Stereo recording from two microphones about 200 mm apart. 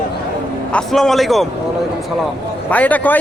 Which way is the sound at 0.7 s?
Centre (ahead or behind).